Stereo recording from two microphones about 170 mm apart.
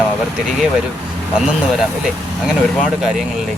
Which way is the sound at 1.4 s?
5° right (ahead or behind).